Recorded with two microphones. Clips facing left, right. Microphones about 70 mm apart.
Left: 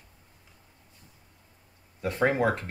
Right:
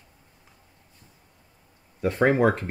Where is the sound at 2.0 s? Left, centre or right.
Right.